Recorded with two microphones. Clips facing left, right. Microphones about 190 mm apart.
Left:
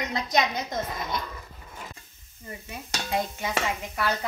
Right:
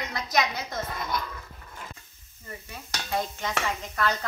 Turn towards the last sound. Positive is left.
turn(degrees=10)  # may be behind; listen again after turning